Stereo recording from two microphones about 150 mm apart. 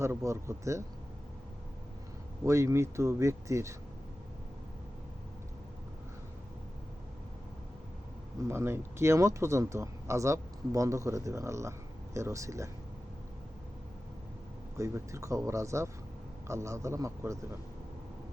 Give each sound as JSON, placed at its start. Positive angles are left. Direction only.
{"t": 0.0, "sound": "speech", "side_deg": -20}
{"t": 2.4, "sound": "speech", "side_deg": -20}
{"t": 8.4, "sound": "speech", "side_deg": -15}
{"t": 14.8, "sound": "speech", "side_deg": -20}